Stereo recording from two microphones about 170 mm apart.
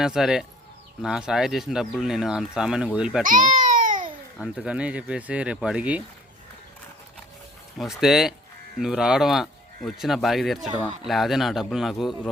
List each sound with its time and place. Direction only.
0.0 s speech: 5° right (ahead or behind)
3.2 s baby cry: 50° right (ahead or behind)
4.4 s speech: 5° right (ahead or behind)
7.8 s speech: centre (ahead or behind)